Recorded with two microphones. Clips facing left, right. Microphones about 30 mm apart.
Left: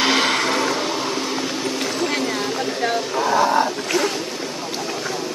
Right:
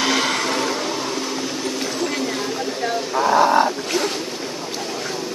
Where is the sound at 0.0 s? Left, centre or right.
Left.